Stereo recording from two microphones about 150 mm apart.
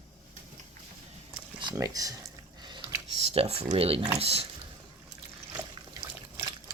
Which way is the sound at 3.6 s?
35° right (ahead or behind).